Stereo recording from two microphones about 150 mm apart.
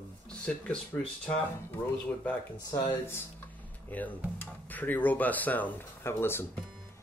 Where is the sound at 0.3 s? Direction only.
5° left (ahead or behind).